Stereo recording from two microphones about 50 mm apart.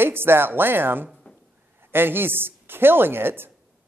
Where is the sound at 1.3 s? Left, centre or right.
Left.